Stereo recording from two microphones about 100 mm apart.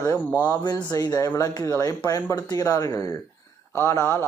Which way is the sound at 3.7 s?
25° left (ahead or behind).